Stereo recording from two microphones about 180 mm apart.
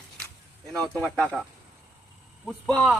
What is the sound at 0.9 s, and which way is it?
Speech, 10° left (ahead or behind).